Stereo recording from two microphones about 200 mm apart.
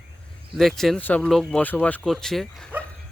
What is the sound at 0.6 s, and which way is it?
Speech, centre (ahead or behind).